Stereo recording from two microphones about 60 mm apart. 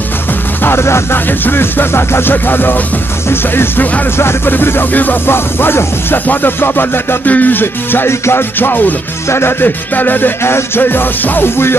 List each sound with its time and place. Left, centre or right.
0.7 s music: left
10.4 s music: left